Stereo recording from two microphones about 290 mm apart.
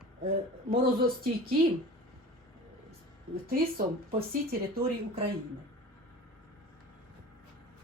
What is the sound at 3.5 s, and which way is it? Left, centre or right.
Speech, right.